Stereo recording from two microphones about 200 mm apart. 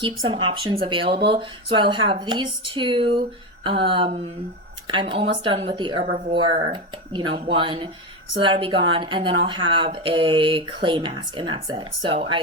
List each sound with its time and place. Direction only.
0.3 s speech: 25° right (ahead or behind)